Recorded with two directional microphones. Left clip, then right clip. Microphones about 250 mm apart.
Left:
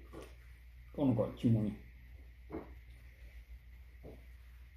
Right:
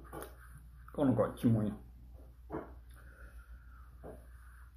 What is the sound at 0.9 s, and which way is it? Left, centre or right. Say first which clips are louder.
Speech: right 3 dB; centre.